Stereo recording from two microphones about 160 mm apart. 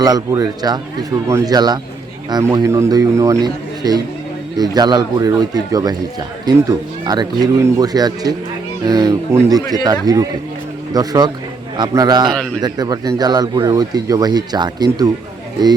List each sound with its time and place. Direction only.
0.0 s speech: 25° right (ahead or behind)